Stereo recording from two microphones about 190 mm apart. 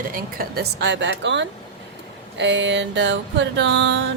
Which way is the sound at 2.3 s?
70° right (ahead or behind).